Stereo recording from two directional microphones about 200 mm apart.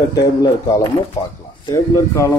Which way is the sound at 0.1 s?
20° left (ahead or behind).